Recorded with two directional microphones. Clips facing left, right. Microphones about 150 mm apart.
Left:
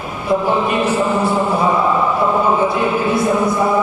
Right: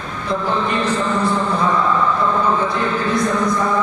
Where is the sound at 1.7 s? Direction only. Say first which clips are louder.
Left 2 dB; 25° left (ahead or behind).